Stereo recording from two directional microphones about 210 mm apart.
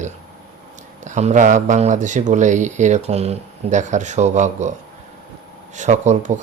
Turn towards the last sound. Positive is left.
turn(degrees=-35)  # may be behind; listen again after turning